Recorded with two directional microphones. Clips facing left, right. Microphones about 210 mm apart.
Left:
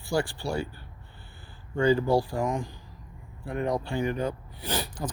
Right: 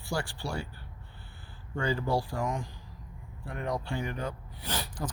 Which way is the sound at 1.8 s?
20° left (ahead or behind).